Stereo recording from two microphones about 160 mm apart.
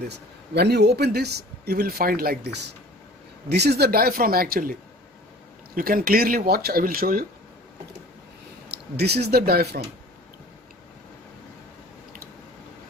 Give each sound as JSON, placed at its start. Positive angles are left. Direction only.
{"t": 0.1, "sound": "speech", "side_deg": -90}
{"t": 3.4, "sound": "speech", "side_deg": -90}
{"t": 5.8, "sound": "speech", "side_deg": -65}
{"t": 8.9, "sound": "speech", "side_deg": -90}